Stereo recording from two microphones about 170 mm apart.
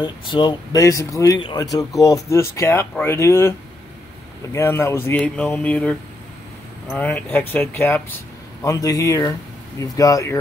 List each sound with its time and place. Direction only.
0.0 s speech: 30° left (ahead or behind)